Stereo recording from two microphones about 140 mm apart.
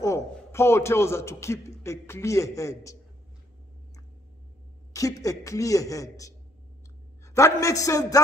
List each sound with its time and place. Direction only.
0.0 s a man's voice: 20° left (ahead or behind)
4.9 s a woman's voice: 25° left (ahead or behind)